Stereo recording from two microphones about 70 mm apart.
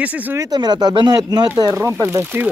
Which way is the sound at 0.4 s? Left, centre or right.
Right.